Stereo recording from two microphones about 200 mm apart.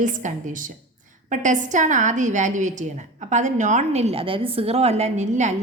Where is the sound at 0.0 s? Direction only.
40° right (ahead or behind).